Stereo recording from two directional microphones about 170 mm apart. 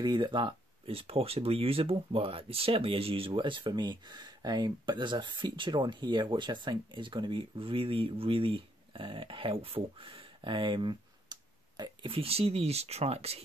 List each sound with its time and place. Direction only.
0.0 s speech: 25° right (ahead or behind)